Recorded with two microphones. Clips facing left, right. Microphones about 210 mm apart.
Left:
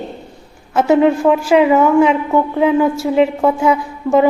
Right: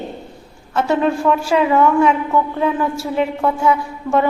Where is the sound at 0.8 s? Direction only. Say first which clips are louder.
Left 5 dB; 20° left (ahead or behind).